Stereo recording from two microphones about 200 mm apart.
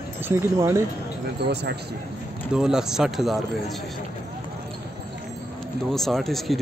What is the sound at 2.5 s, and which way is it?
Speech, 5° right (ahead or behind).